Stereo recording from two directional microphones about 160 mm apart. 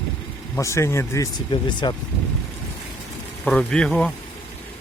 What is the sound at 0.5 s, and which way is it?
Speech, 15° left (ahead or behind).